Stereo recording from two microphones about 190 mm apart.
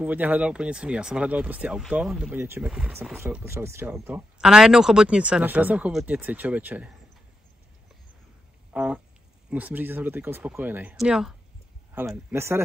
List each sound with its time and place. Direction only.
0.0 s speech: 10° right (ahead or behind)
8.7 s a sound: 5° right (ahead or behind)
9.5 s speech: 10° right (ahead or behind)